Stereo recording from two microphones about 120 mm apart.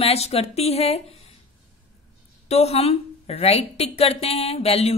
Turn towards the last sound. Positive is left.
turn(degrees=55)  # may be behind; listen again after turning